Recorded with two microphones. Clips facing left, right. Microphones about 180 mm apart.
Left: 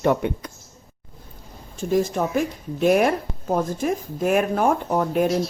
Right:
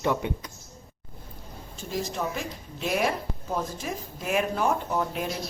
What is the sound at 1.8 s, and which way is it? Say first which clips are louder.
Speech: left 10 dB; 50° left (ahead or behind).